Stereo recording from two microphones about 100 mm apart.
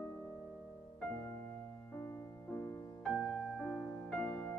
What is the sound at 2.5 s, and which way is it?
Music, 25° left (ahead or behind).